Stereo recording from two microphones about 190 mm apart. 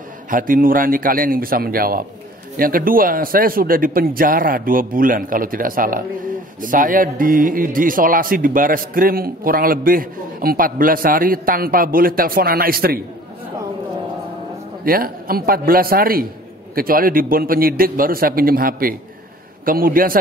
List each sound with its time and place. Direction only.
0.3 s a man's voice: 45° right (ahead or behind)
14.9 s a man's voice: 50° right (ahead or behind)